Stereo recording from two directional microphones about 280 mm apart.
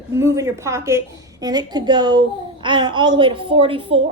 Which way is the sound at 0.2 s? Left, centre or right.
Centre.